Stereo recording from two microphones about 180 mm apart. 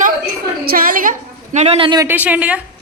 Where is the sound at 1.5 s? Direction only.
35° right (ahead or behind).